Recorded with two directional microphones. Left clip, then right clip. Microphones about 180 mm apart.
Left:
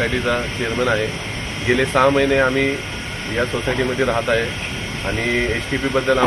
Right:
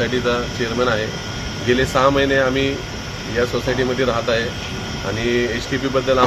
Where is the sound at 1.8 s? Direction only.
15° right (ahead or behind).